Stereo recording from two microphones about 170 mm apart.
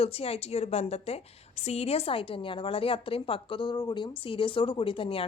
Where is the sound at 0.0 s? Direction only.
35° left (ahead or behind).